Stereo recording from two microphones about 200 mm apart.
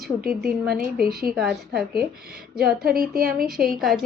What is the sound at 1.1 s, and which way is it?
Speech, 50° right (ahead or behind).